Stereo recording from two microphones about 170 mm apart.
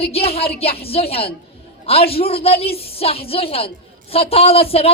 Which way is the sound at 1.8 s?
35° left (ahead or behind).